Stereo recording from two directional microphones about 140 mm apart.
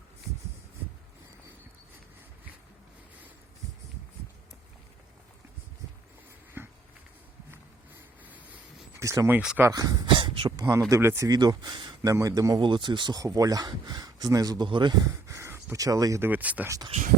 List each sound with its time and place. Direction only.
6.6 s dog: 15° right (ahead or behind)
9.0 s speech: 20° right (ahead or behind)
9.4 s speech: 5° right (ahead or behind)
9.6 s speech: 25° right (ahead or behind)
10.6 s speech: 20° right (ahead or behind)
16.6 s speech: 25° right (ahead or behind)